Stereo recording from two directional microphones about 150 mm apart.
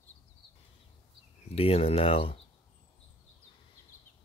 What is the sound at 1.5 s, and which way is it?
Speech, 40° left (ahead or behind).